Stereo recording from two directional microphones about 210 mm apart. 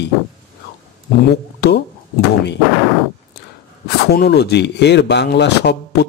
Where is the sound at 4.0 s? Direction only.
50° left (ahead or behind).